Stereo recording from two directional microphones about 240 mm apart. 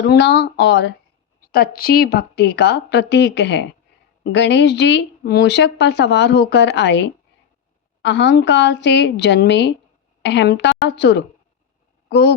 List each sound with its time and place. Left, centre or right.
0.0 s speech: left